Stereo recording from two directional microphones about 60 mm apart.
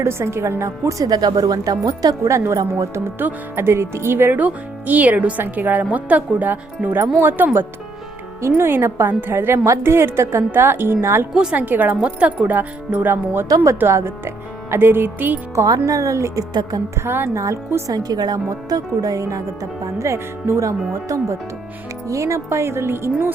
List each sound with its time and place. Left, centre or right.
0.0 s speech: right
2.3 s speech: right
3.2 s speech: right
4.4 s speech: right
8.4 s a woman's voice: right
11.5 s speech: right
15.6 s speech: right
15.9 s speech: right
17.0 s speech: right
17.8 s speech: right
20.0 s a woman's voice: right